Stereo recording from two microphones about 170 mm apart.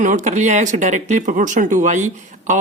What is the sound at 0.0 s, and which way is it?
Speech, 45° right (ahead or behind).